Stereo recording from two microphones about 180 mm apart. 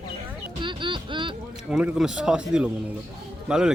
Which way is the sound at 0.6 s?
25° right (ahead or behind).